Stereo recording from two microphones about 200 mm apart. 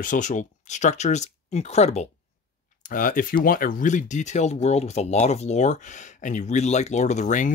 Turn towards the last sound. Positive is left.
turn(degrees=40)  # may be behind; listen again after turning